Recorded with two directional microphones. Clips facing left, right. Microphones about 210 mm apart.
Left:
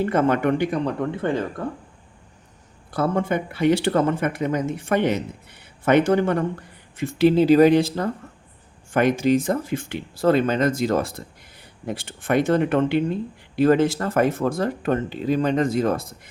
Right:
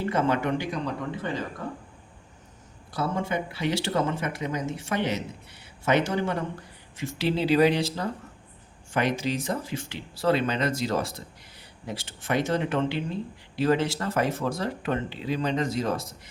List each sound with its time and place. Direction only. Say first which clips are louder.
0.0 s speech: left 6 dB; 55° left (ahead or behind)
2.9 s speech: left 6 dB; 55° left (ahead or behind)